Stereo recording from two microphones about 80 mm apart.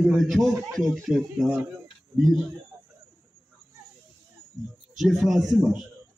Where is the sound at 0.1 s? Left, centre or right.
Centre.